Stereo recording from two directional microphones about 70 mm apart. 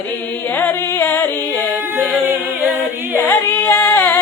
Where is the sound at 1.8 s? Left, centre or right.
Right.